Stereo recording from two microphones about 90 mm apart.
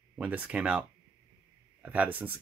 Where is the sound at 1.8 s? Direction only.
15° right (ahead or behind).